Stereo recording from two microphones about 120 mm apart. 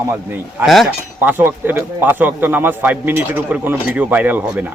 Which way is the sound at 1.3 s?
15° right (ahead or behind).